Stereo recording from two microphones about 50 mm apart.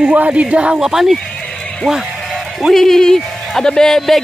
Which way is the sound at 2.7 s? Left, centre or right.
Centre.